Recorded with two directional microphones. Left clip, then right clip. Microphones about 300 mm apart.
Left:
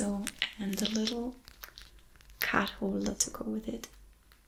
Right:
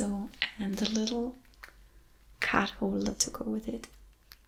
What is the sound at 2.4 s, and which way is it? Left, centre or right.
Speech, centre.